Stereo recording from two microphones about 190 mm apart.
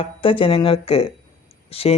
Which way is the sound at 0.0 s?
25° left (ahead or behind).